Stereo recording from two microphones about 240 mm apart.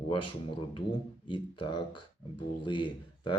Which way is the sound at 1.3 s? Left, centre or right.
Centre.